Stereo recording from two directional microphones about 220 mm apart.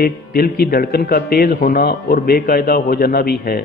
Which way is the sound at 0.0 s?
45° left (ahead or behind).